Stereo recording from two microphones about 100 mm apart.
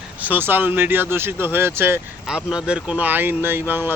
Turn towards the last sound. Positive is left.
turn(degrees=-20)  # may be behind; listen again after turning